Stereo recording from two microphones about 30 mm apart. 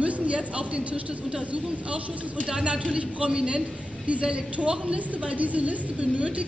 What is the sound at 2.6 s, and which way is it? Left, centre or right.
Speech, right.